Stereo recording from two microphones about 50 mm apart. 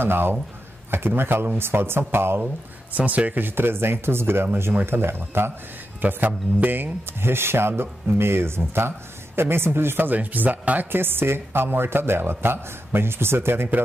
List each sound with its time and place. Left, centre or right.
0.0 s speech: right
2.9 s speech: right
3.3 s speech: right
5.9 s speech: right
10.9 s speech: right